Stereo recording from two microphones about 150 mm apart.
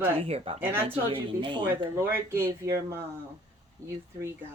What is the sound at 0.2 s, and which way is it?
Speech, 40° right (ahead or behind).